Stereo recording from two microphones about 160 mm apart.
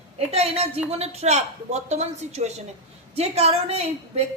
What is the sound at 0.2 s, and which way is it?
A woman's voice, 40° right (ahead or behind).